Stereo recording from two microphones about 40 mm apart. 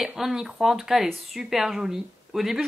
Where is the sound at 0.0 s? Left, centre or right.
Centre.